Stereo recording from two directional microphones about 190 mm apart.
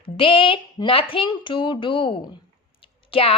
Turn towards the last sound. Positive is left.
turn(degrees=30)  # may be behind; listen again after turning